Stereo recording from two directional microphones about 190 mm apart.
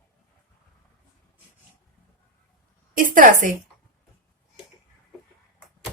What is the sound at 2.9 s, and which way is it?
Speech, 45° right (ahead or behind).